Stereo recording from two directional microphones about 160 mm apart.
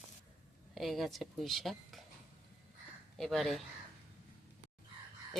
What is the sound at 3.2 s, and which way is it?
Speech, centre (ahead or behind).